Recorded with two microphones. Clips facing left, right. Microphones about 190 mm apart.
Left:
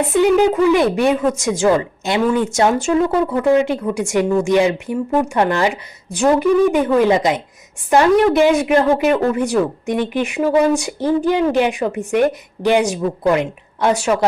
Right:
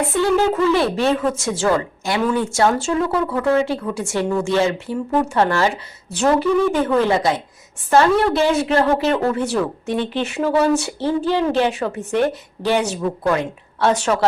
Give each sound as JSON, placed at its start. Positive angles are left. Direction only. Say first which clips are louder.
{"t": 0.1, "sound": "a woman's voice", "louder": "left 6 dB", "side_deg": 15}